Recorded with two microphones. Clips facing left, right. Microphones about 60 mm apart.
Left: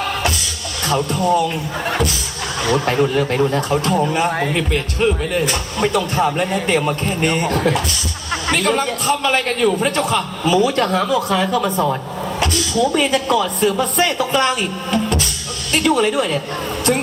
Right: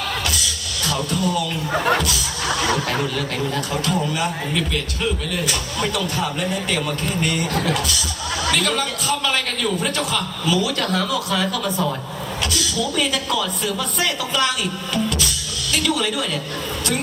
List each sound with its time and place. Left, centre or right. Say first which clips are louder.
0.9 s speech: left 6 dB; left
2.6 s speech: left 10 dB; left